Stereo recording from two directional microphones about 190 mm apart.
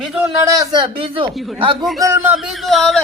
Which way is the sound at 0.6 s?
25° right (ahead or behind).